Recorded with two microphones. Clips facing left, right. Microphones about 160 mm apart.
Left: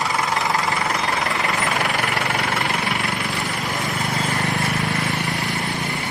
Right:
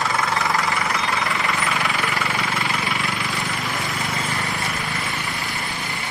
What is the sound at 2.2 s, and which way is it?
Engine, 55° left (ahead or behind).